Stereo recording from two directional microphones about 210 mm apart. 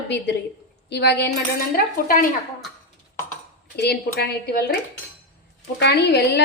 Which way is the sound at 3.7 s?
50° left (ahead or behind).